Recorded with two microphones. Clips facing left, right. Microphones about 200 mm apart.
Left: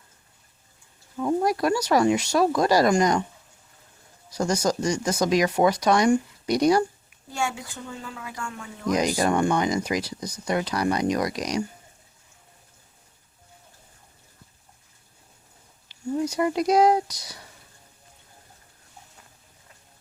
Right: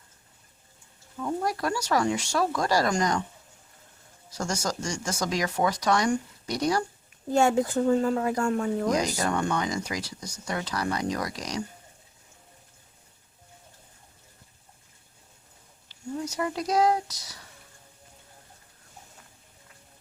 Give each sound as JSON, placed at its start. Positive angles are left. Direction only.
{"t": 1.2, "sound": "speech", "side_deg": 20}
{"t": 4.3, "sound": "speech", "side_deg": 10}
{"t": 7.3, "sound": "speech", "side_deg": -40}
{"t": 9.0, "sound": "speech", "side_deg": 15}
{"t": 10.2, "sound": "speech", "side_deg": 35}
{"t": 10.5, "sound": "speech", "side_deg": 15}
{"t": 16.2, "sound": "speech", "side_deg": 15}